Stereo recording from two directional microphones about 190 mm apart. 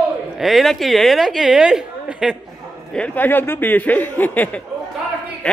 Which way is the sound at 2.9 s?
5° left (ahead or behind).